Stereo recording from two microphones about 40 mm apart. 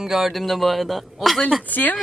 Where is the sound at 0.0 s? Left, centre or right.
Centre.